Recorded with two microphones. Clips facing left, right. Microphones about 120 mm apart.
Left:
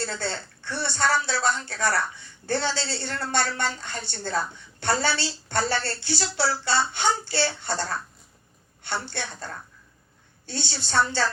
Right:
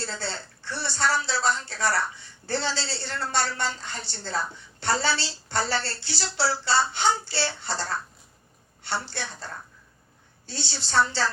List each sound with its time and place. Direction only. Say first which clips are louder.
0.0 s a woman's voice: left 3 dB; 50° left (ahead or behind)
8.8 s a woman's voice: even; 50° left (ahead or behind)
10.4 s a woman's voice: left 3 dB; 50° left (ahead or behind)